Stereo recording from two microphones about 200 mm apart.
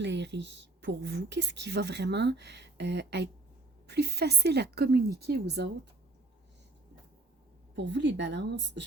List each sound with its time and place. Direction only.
0.0 s a woman's voice: 60° right (ahead or behind)
7.8 s a woman's voice: 60° right (ahead or behind)